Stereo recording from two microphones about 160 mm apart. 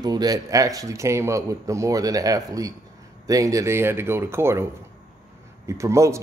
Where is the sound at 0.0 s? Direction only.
25° right (ahead or behind).